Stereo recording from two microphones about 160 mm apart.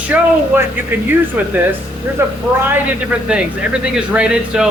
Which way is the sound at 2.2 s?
15° right (ahead or behind).